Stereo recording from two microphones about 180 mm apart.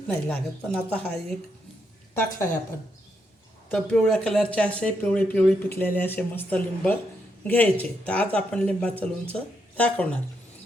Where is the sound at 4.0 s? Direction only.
Centre (ahead or behind).